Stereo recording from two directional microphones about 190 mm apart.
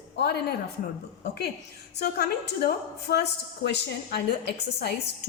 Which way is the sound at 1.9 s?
60° left (ahead or behind).